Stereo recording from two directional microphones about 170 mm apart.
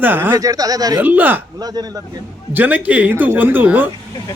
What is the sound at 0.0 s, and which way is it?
Speech, 10° right (ahead or behind).